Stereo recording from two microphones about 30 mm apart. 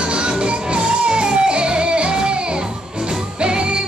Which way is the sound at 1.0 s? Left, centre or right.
Right.